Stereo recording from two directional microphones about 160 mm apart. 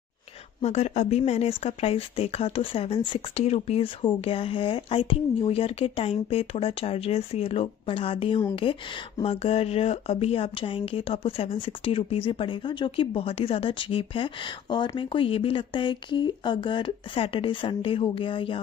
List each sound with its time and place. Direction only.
0.6 s speech: 45° left (ahead or behind)